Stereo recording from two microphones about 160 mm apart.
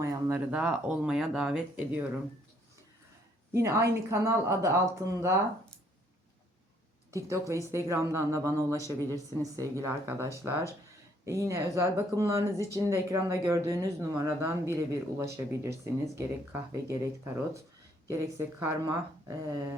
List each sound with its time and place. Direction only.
0.0 s speech: 15° right (ahead or behind)
3.5 s speech: 15° right (ahead or behind)
7.1 s speech: 20° right (ahead or behind)
18.1 s speech: 15° right (ahead or behind)